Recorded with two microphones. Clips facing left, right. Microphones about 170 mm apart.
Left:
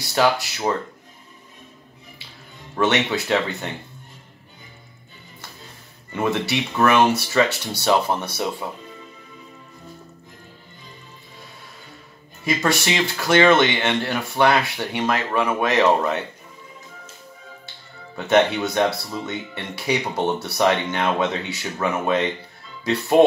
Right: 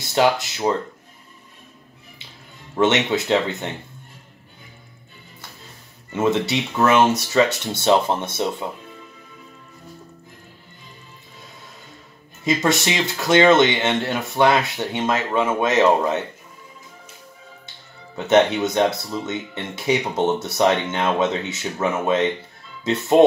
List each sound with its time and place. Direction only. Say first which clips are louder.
0.0 s speech: right 1 dB; 20° right (ahead or behind)
2.8 s speech: right 2 dB; 20° right (ahead or behind)
6.2 s speech: right 2 dB; 20° right (ahead or behind)
12.4 s speech: right 2 dB; 20° right (ahead or behind)
18.1 s speech: right 2 dB; 20° right (ahead or behind)